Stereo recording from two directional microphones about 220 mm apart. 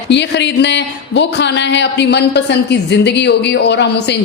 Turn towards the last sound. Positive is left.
turn(degrees=50)  # may be behind; listen again after turning